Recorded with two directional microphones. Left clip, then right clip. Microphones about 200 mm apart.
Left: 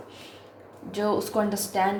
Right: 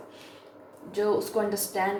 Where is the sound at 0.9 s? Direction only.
40° left (ahead or behind).